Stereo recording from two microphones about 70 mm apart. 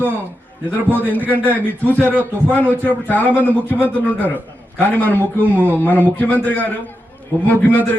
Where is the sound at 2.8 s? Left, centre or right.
Left.